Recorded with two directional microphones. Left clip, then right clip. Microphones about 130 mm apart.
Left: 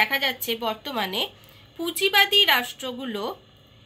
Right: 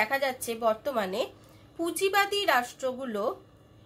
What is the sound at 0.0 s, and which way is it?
Speech, 25° right (ahead or behind).